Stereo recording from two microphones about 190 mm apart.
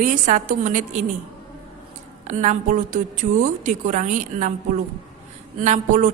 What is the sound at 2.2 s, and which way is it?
A woman's voice, 40° right (ahead or behind).